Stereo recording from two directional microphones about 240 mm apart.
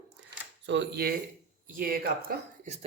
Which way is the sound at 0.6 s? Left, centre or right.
Right.